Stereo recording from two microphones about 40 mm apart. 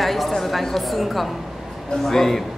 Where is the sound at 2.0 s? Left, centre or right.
Centre.